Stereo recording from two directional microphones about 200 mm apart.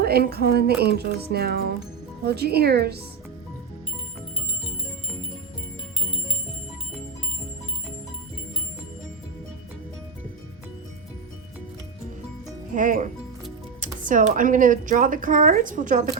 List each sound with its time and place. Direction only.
0.0 s speech: 50° right (ahead or behind)
12.7 s speech: 40° right (ahead or behind)